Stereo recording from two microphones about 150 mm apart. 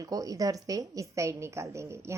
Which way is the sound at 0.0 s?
25° right (ahead or behind).